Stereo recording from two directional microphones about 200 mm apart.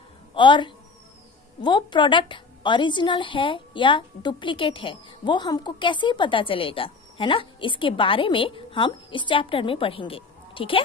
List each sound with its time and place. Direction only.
0.3 s a man's voice: 25° left (ahead or behind)